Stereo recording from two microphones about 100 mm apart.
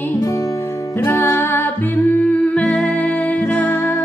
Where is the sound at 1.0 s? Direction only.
25° left (ahead or behind).